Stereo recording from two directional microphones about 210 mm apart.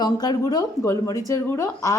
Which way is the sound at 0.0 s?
20° left (ahead or behind).